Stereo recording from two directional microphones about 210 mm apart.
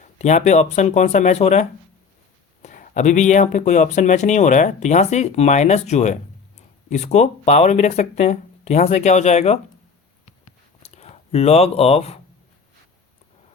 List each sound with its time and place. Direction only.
0.2 s speech: 35° left (ahead or behind)
10.8 s speech: 30° left (ahead or behind)